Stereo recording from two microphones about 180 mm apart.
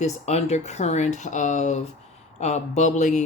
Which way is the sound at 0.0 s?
40° left (ahead or behind).